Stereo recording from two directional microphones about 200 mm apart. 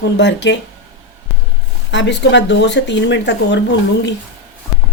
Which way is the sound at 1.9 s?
65° left (ahead or behind).